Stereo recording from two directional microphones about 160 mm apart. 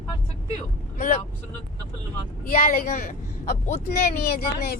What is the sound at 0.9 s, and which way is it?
Speech, 40° left (ahead or behind).